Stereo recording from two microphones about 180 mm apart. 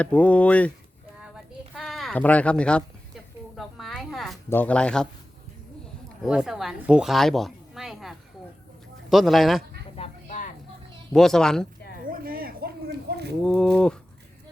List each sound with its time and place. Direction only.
0.0 s speech: 5° left (ahead or behind)
1.7 s speech: centre (ahead or behind)
3.5 s a sound: centre (ahead or behind)
4.4 s speech: 10° left (ahead or behind)
6.2 s a woman's voice: 5° right (ahead or behind)
9.9 s a sound: 35° left (ahead or behind)
11.1 s speech: centre (ahead or behind)
12.0 s a sound: 55° right (ahead or behind)
13.4 s speech: 5° left (ahead or behind)